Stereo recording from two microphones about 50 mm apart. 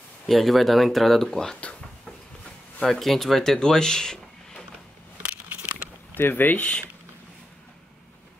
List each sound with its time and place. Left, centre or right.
0.3 s speech: centre
2.8 s speech: centre
3.5 s a sound: centre
6.1 s speech: left